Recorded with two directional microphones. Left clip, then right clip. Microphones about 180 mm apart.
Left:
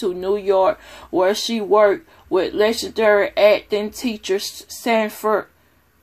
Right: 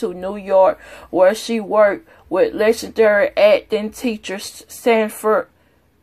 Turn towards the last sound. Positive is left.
turn(degrees=-25)  # may be behind; listen again after turning